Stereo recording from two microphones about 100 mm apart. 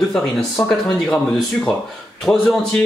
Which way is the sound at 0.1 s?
5° left (ahead or behind).